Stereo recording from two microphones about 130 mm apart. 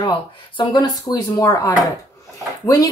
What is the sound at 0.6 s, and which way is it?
A woman's voice, 30° left (ahead or behind).